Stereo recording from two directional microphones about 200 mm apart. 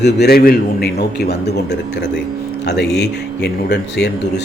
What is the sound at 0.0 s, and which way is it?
A man's voice, 55° left (ahead or behind).